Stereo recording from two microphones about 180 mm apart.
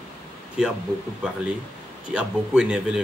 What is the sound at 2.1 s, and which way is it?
Speech, 5° right (ahead or behind).